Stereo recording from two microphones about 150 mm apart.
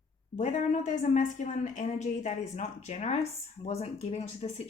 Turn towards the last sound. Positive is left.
turn(degrees=45)  # may be behind; listen again after turning